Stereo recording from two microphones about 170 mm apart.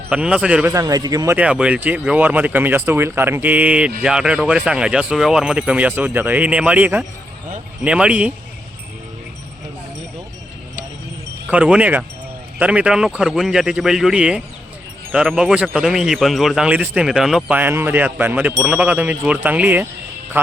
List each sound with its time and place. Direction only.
0.1 s speech: 5° right (ahead or behind)
0.7 s speech: 20° right (ahead or behind)
1.4 s speech: 5° right (ahead or behind)
11.5 s speech: 5° right (ahead or behind)